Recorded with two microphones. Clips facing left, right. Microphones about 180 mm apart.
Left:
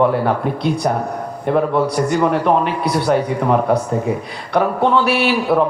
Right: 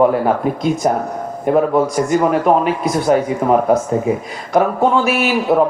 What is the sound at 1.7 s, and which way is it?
Speech, 45° right (ahead or behind).